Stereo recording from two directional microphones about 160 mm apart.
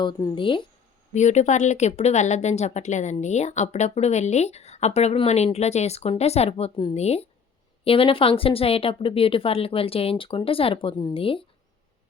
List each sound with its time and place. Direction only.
0.0 s speech: 30° left (ahead or behind)
1.1 s speech: 45° left (ahead or behind)